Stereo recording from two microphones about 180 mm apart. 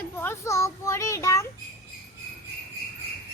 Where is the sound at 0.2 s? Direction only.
15° left (ahead or behind).